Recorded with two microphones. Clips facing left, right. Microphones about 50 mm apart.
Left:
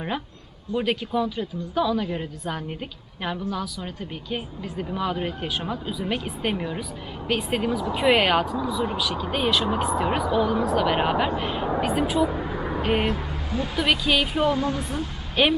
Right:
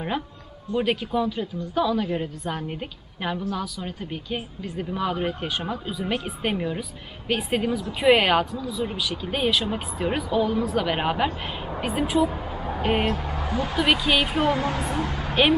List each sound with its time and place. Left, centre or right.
0.7 s a woman's voice: centre
13.3 s a sound: right
13.7 s a woman's voice: centre
14.6 s a woman's voice: right
15.4 s a woman's voice: centre